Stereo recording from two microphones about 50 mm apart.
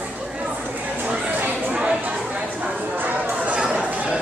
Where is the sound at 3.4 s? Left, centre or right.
Right.